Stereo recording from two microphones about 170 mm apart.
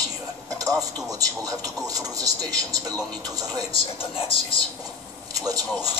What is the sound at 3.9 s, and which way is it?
Speech, 30° left (ahead or behind).